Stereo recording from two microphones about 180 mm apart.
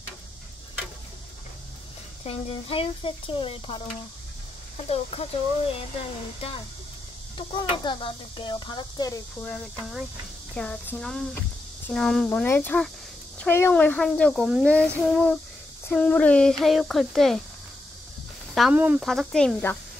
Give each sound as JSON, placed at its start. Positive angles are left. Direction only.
{"t": 2.2, "sound": "speech", "side_deg": 30}
{"t": 7.3, "sound": "speech", "side_deg": 25}
{"t": 9.4, "sound": "speech", "side_deg": 0}
{"t": 18.5, "sound": "speech", "side_deg": -5}